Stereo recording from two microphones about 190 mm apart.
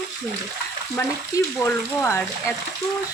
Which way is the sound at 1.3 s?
15° left (ahead or behind).